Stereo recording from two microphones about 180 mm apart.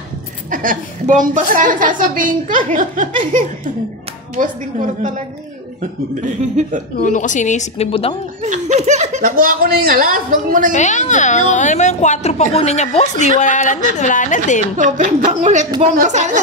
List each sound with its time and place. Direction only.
0.5 s a woman's voice: 50° right (ahead or behind)
6.2 s a woman's voice: 45° right (ahead or behind)
7.0 s a woman's voice: 45° left (ahead or behind)
8.4 s a woman's voice: 40° right (ahead or behind)
10.7 s a child's voice: 40° left (ahead or behind)
14.8 s a woman's voice: 45° right (ahead or behind)